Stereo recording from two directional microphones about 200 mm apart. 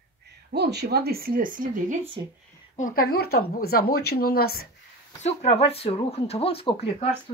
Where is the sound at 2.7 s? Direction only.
45° left (ahead or behind).